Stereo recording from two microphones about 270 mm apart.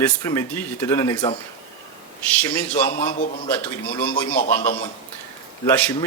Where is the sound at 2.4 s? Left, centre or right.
Centre.